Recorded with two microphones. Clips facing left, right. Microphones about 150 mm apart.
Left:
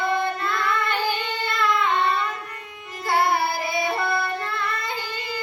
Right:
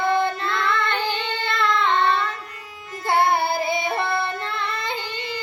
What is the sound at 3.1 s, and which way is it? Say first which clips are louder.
Carnatic music: right 2 dB; 25° right (ahead or behind).